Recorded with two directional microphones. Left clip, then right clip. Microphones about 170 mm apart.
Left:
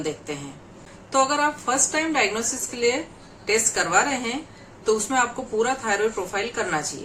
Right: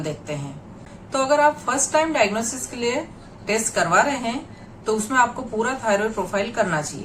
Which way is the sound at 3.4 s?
20° left (ahead or behind).